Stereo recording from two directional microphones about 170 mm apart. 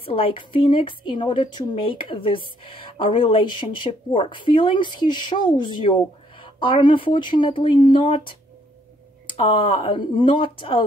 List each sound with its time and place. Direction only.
0.0 s a woman's voice: 35° left (ahead or behind)